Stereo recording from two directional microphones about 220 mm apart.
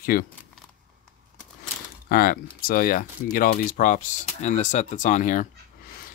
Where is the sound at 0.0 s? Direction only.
40° left (ahead or behind).